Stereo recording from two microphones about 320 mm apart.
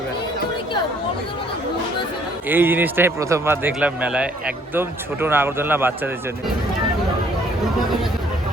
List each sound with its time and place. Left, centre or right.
2.5 s speech: centre